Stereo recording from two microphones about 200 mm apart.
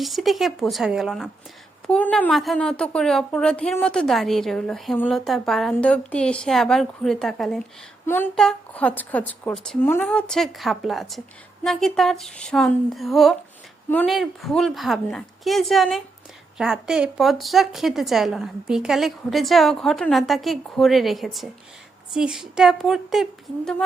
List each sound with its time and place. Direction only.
0.0 s a woman's voice: centre (ahead or behind)